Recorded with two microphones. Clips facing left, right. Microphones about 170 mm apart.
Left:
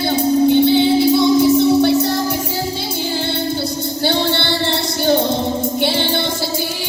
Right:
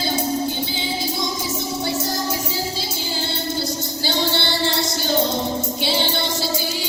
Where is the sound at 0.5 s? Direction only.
65° left (ahead or behind).